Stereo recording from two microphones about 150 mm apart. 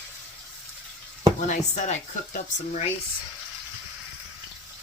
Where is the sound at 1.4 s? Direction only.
50° left (ahead or behind).